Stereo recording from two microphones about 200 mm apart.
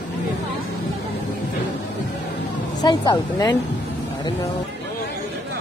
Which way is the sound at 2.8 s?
20° left (ahead or behind).